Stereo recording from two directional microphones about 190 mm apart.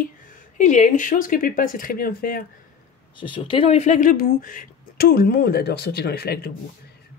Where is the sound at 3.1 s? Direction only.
25° left (ahead or behind); by 6.5 s 55° left (ahead or behind).